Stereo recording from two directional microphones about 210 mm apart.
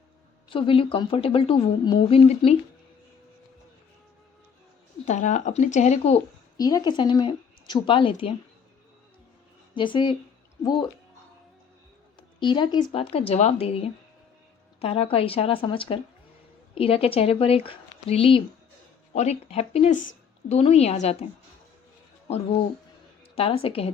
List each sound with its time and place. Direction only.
0.5 s speech: 25° left (ahead or behind)
5.0 s speech: 35° left (ahead or behind)
6.6 s speech: 15° left (ahead or behind)
9.7 s speech: 20° left (ahead or behind)
12.4 s speech: 20° left (ahead or behind)
23.3 s a woman's voice: 25° left (ahead or behind)